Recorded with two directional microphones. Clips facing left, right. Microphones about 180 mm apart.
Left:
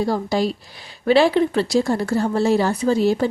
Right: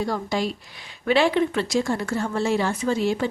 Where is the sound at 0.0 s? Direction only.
35° left (ahead or behind).